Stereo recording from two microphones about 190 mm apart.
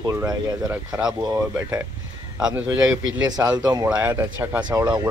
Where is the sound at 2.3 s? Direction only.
5° right (ahead or behind).